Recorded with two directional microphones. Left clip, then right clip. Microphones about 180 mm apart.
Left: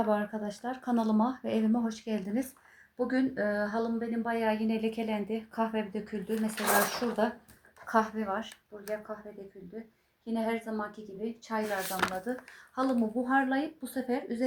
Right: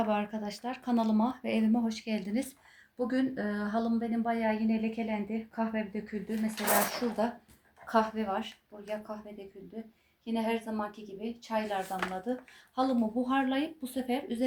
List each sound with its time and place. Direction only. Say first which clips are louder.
0.1 s a woman's voice: left 2 dB; 15° left (ahead or behind)
10.2 s speech: even; 15° left (ahead or behind)